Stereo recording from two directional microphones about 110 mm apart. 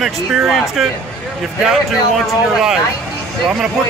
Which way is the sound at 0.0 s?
5° right (ahead or behind).